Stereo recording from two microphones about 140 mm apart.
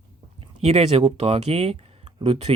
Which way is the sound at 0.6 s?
50° right (ahead or behind).